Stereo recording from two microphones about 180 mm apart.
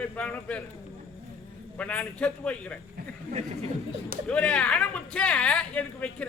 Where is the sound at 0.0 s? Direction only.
5° left (ahead or behind).